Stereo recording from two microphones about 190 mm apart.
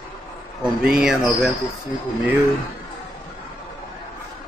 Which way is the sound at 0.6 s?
5° right (ahead or behind).